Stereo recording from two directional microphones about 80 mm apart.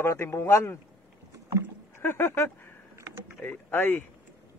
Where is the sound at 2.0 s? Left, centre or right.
Left.